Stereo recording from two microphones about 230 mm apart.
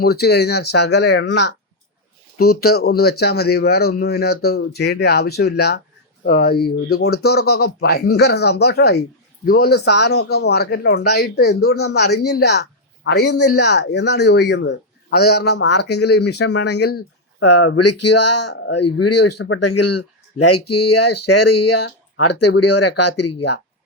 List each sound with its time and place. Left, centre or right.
0.0 s speech: left
13.3 s speech: left
13.6 s speech: left
17.4 s speech: left
18.4 s speech: left
18.8 s speech: left